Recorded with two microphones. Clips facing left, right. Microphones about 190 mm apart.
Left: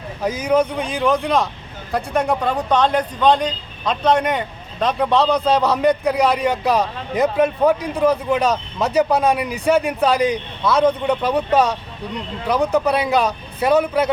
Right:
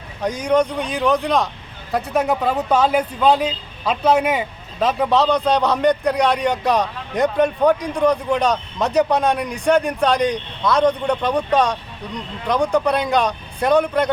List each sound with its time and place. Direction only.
0.2 s speech: 5° left (ahead or behind)